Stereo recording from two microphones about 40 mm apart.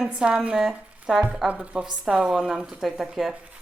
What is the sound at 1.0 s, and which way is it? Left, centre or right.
Speech, right.